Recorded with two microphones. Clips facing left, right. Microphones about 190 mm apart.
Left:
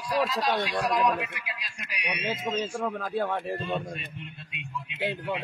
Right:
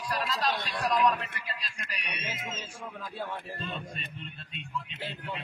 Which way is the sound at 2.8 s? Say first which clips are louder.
Left 10 dB; 65° left (ahead or behind).